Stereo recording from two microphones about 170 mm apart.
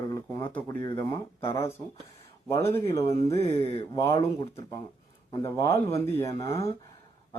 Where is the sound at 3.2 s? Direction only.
35° left (ahead or behind).